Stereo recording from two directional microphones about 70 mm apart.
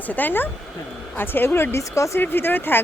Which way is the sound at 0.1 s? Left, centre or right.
Left.